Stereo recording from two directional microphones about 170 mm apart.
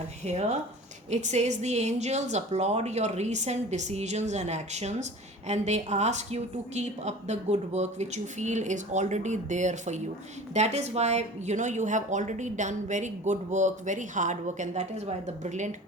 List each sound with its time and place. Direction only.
0.3 s speech: 40° right (ahead or behind)